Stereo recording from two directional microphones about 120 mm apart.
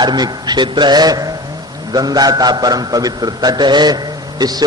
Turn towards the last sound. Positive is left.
turn(degrees=-35)  # may be behind; listen again after turning